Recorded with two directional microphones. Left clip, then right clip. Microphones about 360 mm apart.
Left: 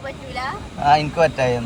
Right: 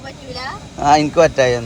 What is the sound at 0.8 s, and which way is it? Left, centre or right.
Speech, right.